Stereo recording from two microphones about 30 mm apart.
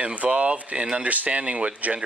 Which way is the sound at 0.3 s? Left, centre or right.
Right.